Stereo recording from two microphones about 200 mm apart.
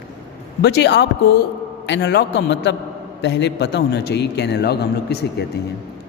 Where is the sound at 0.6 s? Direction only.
60° left (ahead or behind).